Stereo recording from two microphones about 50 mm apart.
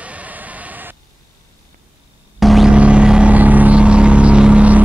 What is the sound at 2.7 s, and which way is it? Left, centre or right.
Vehicle, right.